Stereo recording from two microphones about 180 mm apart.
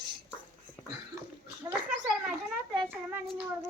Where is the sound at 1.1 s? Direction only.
15° right (ahead or behind).